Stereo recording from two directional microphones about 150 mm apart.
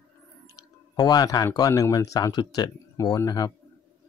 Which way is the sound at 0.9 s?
25° left (ahead or behind).